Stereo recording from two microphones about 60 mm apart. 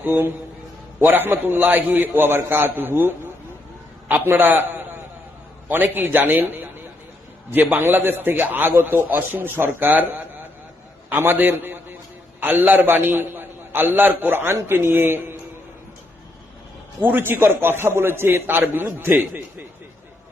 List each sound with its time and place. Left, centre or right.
0.0 s a man's voice: right
9.9 s a man's voice: right
17.0 s a man's voice: right